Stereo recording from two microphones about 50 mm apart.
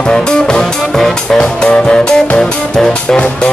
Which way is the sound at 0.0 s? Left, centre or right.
Centre.